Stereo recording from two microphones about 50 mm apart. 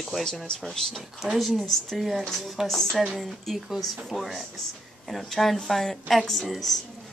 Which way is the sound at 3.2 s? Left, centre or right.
Centre.